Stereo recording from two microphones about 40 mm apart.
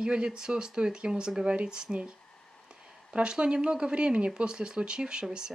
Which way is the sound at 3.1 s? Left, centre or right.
Right.